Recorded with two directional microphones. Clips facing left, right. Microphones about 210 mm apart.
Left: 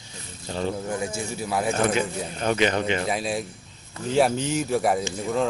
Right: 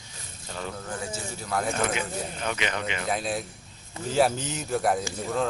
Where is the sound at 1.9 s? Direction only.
35° left (ahead or behind).